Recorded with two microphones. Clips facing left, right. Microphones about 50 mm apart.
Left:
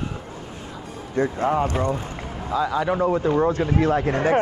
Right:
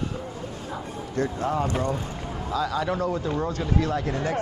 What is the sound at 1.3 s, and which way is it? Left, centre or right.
Speech, left.